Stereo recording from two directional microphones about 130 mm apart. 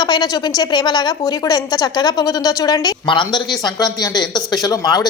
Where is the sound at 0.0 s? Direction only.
30° left (ahead or behind).